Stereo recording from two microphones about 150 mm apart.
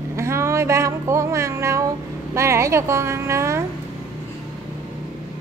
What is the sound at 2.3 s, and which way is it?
A woman's voice, 20° right (ahead or behind).